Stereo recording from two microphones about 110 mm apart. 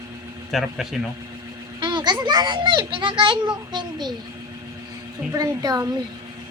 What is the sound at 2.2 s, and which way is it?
A child's voice, 40° right (ahead or behind).